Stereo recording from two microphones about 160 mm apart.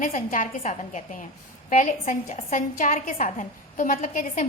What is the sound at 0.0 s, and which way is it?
A woman's voice, 55° left (ahead or behind).